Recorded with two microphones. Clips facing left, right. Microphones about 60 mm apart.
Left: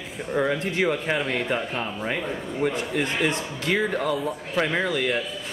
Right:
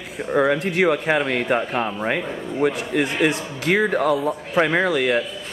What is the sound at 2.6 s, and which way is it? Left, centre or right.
Speech, right.